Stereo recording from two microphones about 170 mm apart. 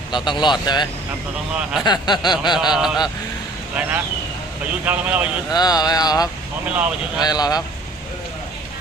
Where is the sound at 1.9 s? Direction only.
25° left (ahead or behind).